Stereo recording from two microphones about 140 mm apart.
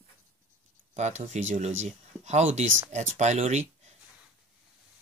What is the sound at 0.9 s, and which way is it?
Speech, 55° right (ahead or behind).